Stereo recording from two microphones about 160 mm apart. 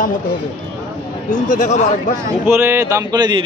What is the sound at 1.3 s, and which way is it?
Speech, 55° left (ahead or behind).